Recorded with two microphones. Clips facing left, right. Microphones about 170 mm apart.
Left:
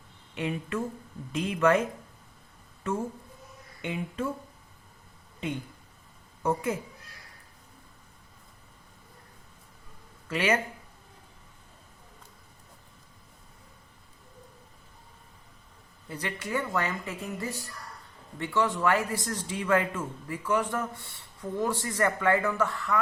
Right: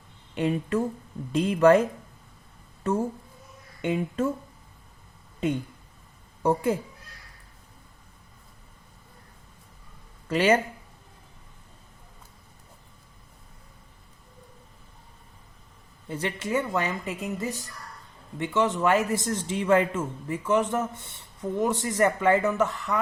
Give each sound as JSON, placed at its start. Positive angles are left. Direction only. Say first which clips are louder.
{"t": 0.3, "sound": "speech", "louder": "right 6 dB", "side_deg": -35}
{"t": 3.8, "sound": "speech", "louder": "right 6 dB", "side_deg": -45}
{"t": 6.4, "sound": "a woman's voice", "louder": "right 5 dB", "side_deg": -30}
{"t": 10.2, "sound": "speech", "louder": "right 5 dB", "side_deg": -35}
{"t": 16.0, "sound": "a man's voice", "louder": "right 5 dB", "side_deg": -25}